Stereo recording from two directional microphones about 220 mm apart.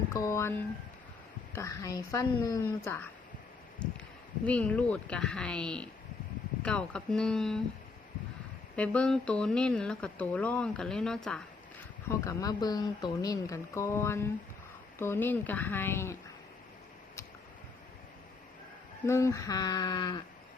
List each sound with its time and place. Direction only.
0.1 s speech: 15° left (ahead or behind)
3.8 s a sound: 5° left (ahead or behind)
4.4 s speech: 5° left (ahead or behind)
8.7 s speech: 5° left (ahead or behind)
12.0 s speech: 15° left (ahead or behind)
19.0 s speech: 15° left (ahead or behind)